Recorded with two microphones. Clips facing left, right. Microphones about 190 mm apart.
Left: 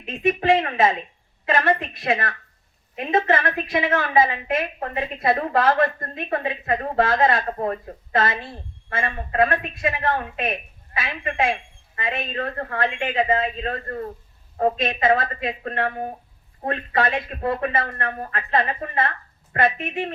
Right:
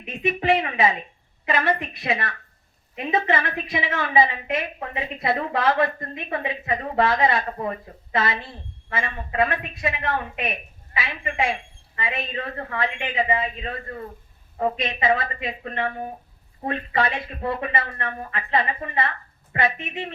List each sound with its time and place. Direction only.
0.2 s a woman's voice: 45° left (ahead or behind)